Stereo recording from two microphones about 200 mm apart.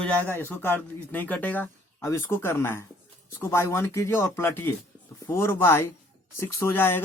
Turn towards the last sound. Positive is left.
turn(degrees=10)  # may be behind; listen again after turning